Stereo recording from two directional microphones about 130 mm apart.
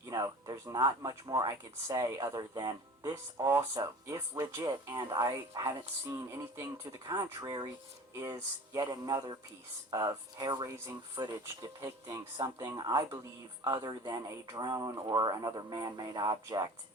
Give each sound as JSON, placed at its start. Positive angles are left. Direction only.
{"t": 0.1, "sound": "speech", "side_deg": -30}